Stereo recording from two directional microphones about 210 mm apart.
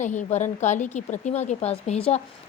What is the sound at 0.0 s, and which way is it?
A woman's voice, 35° left (ahead or behind).